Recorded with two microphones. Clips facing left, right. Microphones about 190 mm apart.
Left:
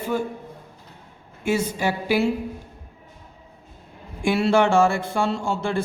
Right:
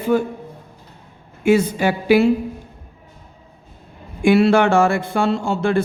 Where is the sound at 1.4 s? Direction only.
60° right (ahead or behind).